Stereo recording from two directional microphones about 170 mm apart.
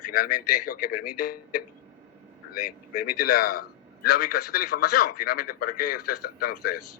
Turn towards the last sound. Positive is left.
turn(degrees=60)  # may be behind; listen again after turning